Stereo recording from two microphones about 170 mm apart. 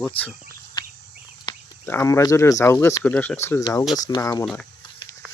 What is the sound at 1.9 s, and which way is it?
Speech, 15° left (ahead or behind).